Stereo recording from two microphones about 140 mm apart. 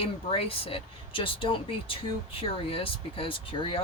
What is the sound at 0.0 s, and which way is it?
Speech, 40° left (ahead or behind).